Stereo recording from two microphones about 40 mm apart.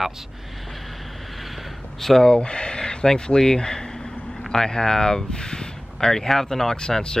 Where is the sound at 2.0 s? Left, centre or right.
Centre.